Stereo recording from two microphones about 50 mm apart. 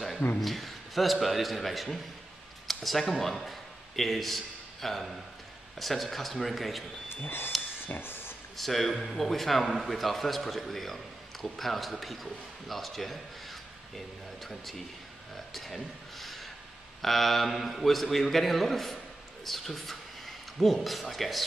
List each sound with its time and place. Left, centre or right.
0.4 s a man's voice: centre
7.2 s speech: left
8.0 s a sound: left
8.5 s a man's voice: centre
15.3 s a sound: centre
17.0 s a man's voice: centre